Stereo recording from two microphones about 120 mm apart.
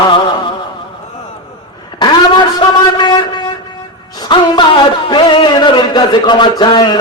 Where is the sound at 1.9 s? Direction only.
35° left (ahead or behind).